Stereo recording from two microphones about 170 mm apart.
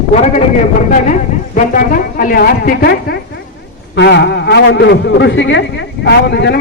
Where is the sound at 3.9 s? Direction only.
80° left.